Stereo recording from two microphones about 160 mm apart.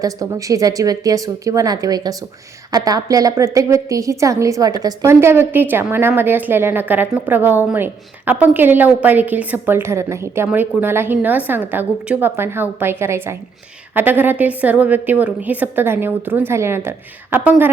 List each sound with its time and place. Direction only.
0.0 s a woman's voice: 20° right (ahead or behind)